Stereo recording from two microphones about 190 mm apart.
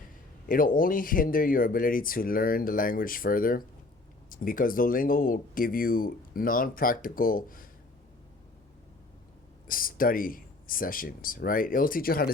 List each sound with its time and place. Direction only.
0.4 s speech: 45° left (ahead or behind)
9.6 s speech: 50° left (ahead or behind)